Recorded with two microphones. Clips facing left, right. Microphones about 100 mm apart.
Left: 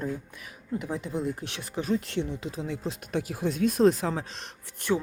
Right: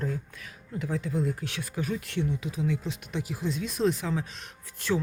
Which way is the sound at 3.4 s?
50° left (ahead or behind).